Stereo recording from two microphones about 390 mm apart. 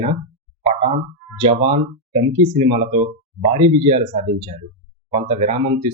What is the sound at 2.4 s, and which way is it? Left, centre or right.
Speech, centre.